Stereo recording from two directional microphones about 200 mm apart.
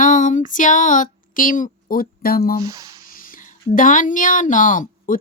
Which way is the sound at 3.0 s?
45° left (ahead or behind).